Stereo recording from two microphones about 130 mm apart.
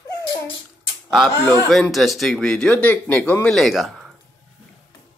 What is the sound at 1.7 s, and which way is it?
Speech, centre (ahead or behind).